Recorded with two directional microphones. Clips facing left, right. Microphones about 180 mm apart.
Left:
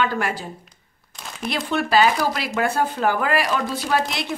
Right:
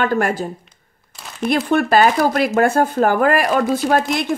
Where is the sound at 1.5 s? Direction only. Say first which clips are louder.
Right 5 dB; 50° right (ahead or behind).